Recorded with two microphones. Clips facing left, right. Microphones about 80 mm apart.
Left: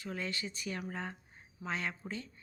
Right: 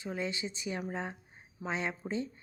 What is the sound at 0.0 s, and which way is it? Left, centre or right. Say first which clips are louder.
Speech: right 3 dB; centre.